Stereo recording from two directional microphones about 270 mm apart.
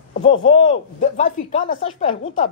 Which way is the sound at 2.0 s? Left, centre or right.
Left.